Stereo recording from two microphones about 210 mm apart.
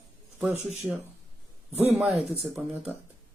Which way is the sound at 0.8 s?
Centre (ahead or behind).